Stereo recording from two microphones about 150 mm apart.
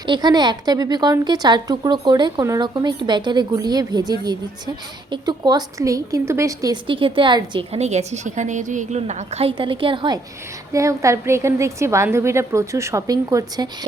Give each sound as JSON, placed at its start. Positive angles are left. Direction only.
{"t": 0.0, "sound": "a woman's voice", "side_deg": -30}
{"t": 6.8, "sound": "a woman's voice", "side_deg": -35}
{"t": 7.7, "sound": "a woman's voice", "side_deg": -50}
{"t": 10.7, "sound": "a woman's voice", "side_deg": -20}